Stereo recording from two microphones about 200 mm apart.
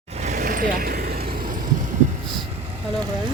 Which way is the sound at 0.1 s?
35° right (ahead or behind).